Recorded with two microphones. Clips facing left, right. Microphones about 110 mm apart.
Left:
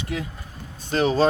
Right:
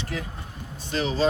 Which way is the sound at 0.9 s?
45° left (ahead or behind).